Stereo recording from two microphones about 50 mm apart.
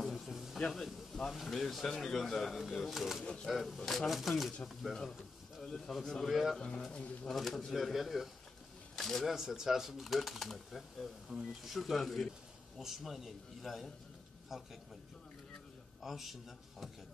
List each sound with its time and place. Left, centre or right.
0.0 s a sound: centre
0.6 s speech: centre
6.9 s speech: left
7.2 s speech: centre
9.3 s speech: centre
16.0 s speech: centre